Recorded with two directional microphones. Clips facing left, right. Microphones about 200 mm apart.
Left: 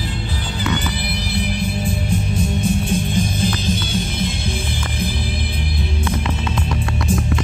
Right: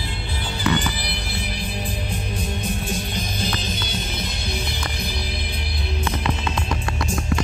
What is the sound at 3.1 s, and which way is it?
Music, 50° left (ahead or behind).